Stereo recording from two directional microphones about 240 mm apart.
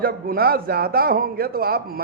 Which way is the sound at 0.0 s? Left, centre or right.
Right.